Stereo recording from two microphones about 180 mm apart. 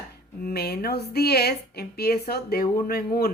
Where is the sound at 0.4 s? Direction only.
60° left (ahead or behind).